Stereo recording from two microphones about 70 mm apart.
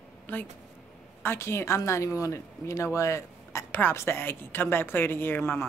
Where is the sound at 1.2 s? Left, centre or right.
Left.